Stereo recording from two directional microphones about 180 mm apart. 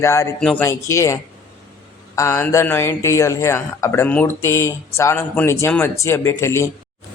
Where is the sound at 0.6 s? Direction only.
15° left (ahead or behind).